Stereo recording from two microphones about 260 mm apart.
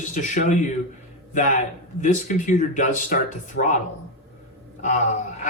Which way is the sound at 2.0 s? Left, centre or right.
Left.